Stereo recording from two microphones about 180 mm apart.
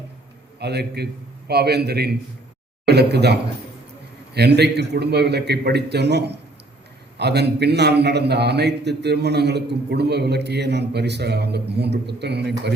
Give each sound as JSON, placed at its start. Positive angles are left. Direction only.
{"t": 0.6, "sound": "a man's voice", "side_deg": -65}